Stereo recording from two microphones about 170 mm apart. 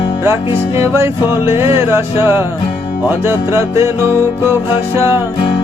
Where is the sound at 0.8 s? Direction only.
15° right (ahead or behind).